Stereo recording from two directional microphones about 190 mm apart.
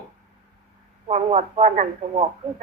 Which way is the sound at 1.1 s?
35° right (ahead or behind).